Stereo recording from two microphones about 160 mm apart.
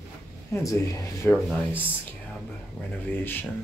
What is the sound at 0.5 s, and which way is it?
Speech, 20° left (ahead or behind).